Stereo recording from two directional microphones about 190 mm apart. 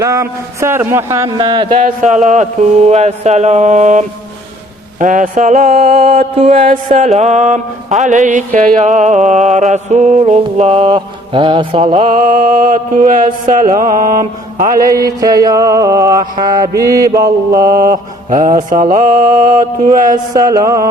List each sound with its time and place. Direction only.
0.0 s speech: 15° right (ahead or behind)
1.8 s music: 40° right (ahead or behind)
12.0 s mantra: 45° right (ahead or behind)
15.0 s speech: 20° right (ahead or behind)
18.3 s mantra: 45° right (ahead or behind)
20.3 s speech: 20° right (ahead or behind)